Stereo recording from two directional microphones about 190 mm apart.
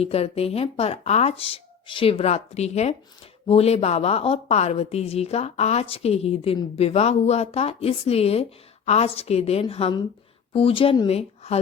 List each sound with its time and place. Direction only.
0.0 s a woman's voice: 30° left (ahead or behind)